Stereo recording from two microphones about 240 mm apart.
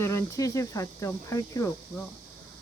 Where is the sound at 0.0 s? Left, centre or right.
Centre.